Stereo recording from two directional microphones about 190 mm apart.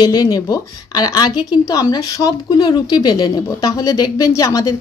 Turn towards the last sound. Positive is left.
turn(degrees=20)  # may be behind; listen again after turning